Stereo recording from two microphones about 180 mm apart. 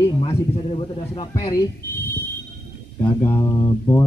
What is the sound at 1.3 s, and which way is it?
Speech, 20° left (ahead or behind).